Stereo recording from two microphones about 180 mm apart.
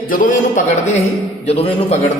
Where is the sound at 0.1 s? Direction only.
50° left (ahead or behind).